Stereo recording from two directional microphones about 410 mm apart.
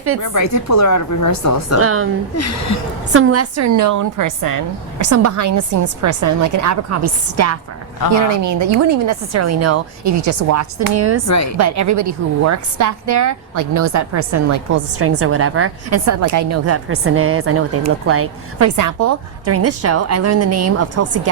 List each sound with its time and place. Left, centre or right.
0.2 s speech: left
1.8 s a woman's voice: right
2.3 s speech: left
3.1 s a woman's voice: right
18.8 s a woman's voice: right